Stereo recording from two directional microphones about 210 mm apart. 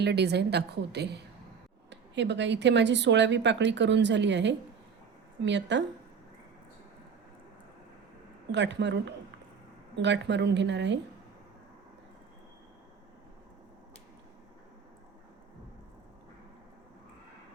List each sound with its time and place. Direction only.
0.0 s a woman's voice: 55° right (ahead or behind)
8.5 s speech: 55° right (ahead or behind)